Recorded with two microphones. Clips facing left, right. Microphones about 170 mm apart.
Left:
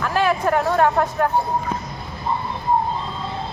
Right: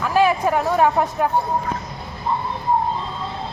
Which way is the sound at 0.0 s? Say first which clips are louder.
Right 2 dB; 10° right (ahead or behind).